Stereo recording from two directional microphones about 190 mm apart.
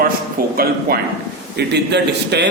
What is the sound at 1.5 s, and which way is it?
Speech, 65° right (ahead or behind).